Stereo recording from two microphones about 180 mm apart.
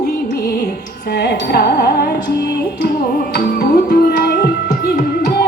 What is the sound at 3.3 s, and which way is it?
Music, 55° left (ahead or behind).